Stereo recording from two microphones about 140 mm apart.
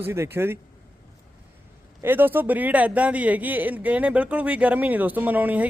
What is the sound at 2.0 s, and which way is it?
A man's voice, 15° right (ahead or behind).